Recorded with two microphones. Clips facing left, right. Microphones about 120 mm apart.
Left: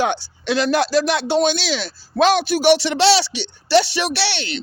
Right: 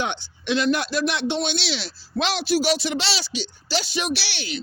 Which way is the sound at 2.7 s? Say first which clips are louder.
Left 10 dB; 75° left (ahead or behind).